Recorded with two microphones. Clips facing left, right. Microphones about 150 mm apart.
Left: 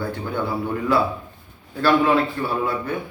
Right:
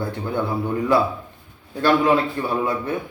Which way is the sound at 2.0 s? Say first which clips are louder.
Right 1 dB; 20° right (ahead or behind).